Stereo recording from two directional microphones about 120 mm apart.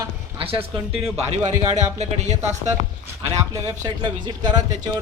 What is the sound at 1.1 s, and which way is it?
Speech, 75° right (ahead or behind).